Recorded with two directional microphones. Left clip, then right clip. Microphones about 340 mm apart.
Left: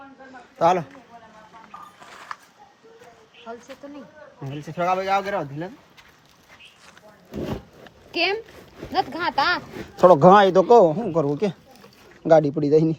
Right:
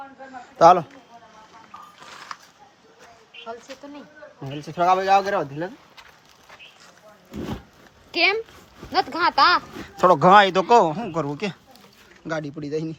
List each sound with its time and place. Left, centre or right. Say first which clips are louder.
0.6 s speech: right 6 dB; centre
4.4 s speech: right 4 dB; centre
8.1 s speech: right 3 dB; centre
9.8 s a man's voice: left 4 dB; centre
12.2 s speech: left 13 dB; centre